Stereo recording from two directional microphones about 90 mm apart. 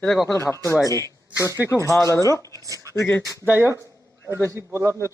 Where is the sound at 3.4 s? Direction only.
25° right (ahead or behind).